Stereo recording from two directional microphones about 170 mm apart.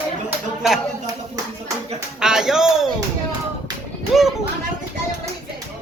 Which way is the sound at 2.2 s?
5° right (ahead or behind).